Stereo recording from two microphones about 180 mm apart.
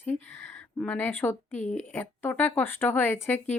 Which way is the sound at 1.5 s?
40° left (ahead or behind).